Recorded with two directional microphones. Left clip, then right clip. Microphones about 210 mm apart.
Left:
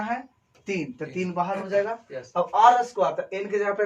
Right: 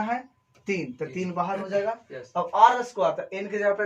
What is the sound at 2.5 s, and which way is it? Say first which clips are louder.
Speech: left 1 dB; 20° left (ahead or behind).